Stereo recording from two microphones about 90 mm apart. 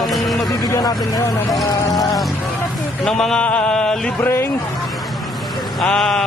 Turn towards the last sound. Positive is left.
turn(degrees=5)  # may be behind; listen again after turning